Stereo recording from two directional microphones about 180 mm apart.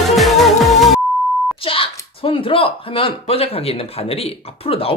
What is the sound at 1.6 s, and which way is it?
Speech, 30° left (ahead or behind).